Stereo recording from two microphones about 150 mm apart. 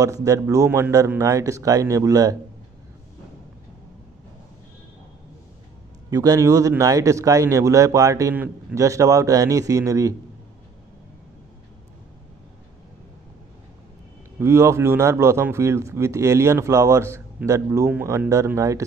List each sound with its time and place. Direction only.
0.0 s a man's voice: 20° right (ahead or behind)
6.0 s a man's voice: 25° right (ahead or behind)
14.4 s a man's voice: 20° right (ahead or behind)